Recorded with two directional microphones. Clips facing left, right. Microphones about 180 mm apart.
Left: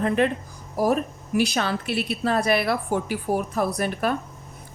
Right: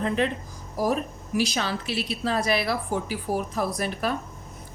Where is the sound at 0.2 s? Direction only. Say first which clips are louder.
Left 4 dB; 55° left (ahead or behind).